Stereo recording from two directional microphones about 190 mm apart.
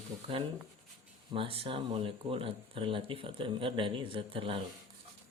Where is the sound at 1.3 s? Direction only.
30° right (ahead or behind).